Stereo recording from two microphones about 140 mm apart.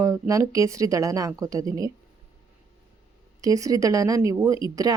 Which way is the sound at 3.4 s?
25° right (ahead or behind).